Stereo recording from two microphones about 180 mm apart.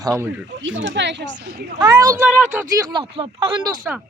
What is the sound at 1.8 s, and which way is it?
Speech, 20° right (ahead or behind).